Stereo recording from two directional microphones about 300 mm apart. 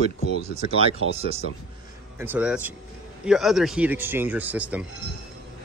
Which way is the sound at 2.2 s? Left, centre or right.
Centre.